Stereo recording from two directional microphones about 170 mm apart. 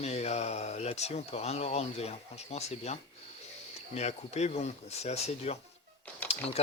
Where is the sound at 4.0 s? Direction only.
40° left (ahead or behind).